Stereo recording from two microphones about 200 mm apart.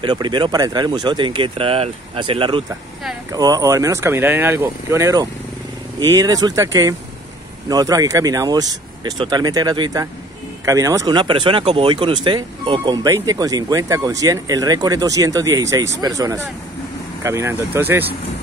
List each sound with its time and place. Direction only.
0.0 s speech: 20° right (ahead or behind)